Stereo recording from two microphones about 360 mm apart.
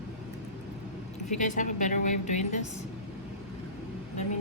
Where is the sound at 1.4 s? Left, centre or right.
Left.